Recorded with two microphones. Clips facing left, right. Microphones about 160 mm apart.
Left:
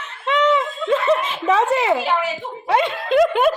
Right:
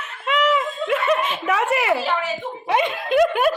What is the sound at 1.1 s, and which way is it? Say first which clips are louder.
Chuckle: left 2 dB; 25° left (ahead or behind).